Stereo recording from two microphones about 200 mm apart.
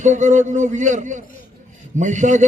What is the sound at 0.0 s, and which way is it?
A man's voice, 40° right (ahead or behind).